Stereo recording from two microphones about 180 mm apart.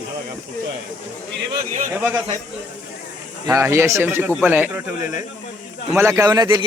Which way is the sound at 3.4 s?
15° right (ahead or behind).